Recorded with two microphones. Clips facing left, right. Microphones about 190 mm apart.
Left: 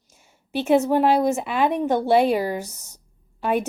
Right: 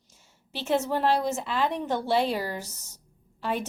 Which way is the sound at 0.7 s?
15° left (ahead or behind).